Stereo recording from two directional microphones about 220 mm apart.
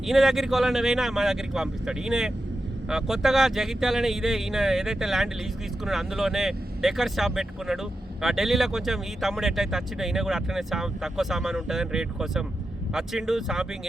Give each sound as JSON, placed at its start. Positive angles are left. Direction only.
{"t": 0.0, "sound": "speech", "side_deg": 0}